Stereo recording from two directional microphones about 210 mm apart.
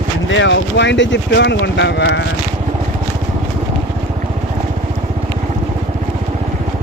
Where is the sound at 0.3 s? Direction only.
60° left (ahead or behind).